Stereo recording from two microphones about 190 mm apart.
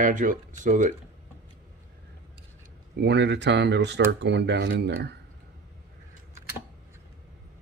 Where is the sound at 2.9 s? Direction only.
65° right (ahead or behind).